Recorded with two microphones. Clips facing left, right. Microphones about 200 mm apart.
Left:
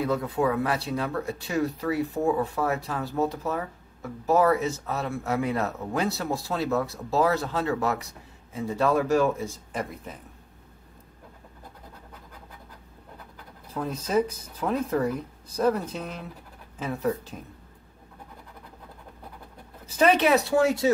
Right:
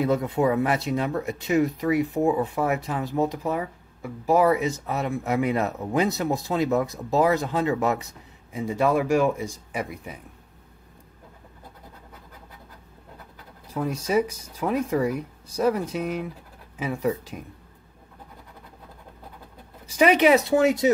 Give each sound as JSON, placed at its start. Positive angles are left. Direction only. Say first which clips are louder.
{"t": 0.0, "sound": "speech", "louder": "right 3 dB", "side_deg": -20}
{"t": 13.7, "sound": "speech", "louder": "right 2 dB", "side_deg": -10}
{"t": 19.9, "sound": "speech", "louder": "right 3 dB", "side_deg": -10}